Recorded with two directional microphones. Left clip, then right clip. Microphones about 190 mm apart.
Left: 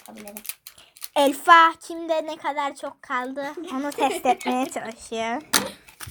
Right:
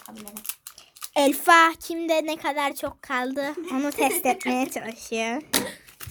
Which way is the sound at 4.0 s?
15° right (ahead or behind).